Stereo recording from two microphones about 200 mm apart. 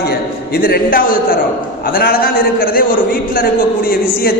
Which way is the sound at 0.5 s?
50° left (ahead or behind).